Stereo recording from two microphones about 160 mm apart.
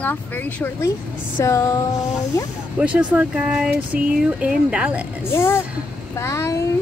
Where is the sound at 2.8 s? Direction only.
5° right (ahead or behind).